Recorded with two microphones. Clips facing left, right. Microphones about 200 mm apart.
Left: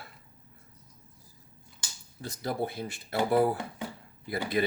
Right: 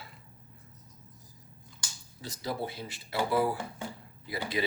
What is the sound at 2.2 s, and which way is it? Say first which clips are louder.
Speech: left 3 dB; 55° left (ahead or behind).